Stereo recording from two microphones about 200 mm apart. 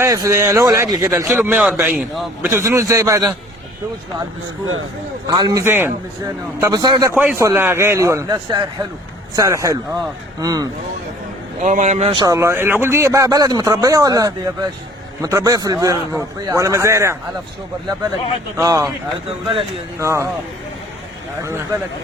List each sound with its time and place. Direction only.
0.0 s a man's voice: 15° right (ahead or behind)
5.3 s a man's voice: 20° right (ahead or behind)
11.6 s a man's voice: 35° right (ahead or behind); by 17.2 s 15° right (ahead or behind)
18.5 s a man's voice: 15° right (ahead or behind)
20.0 s a man's voice: 15° right (ahead or behind)
21.4 s a man's voice: 15° right (ahead or behind)